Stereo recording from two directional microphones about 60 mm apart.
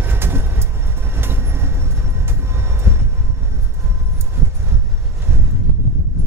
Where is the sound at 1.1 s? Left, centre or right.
Right.